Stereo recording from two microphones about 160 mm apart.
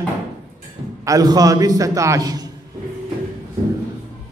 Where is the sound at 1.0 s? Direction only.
20° right (ahead or behind).